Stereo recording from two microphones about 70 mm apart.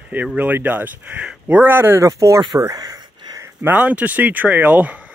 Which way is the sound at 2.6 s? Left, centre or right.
Right.